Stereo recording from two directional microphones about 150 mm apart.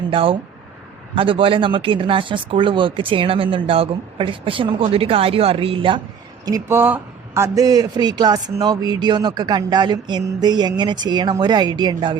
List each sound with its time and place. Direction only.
0.1 s speech: 35° right (ahead or behind)
6.4 s speech: 20° right (ahead or behind)